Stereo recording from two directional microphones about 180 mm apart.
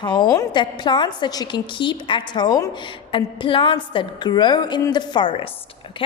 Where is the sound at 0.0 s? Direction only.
25° left (ahead or behind).